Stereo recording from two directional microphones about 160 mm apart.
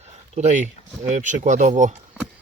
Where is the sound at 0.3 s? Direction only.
50° right (ahead or behind).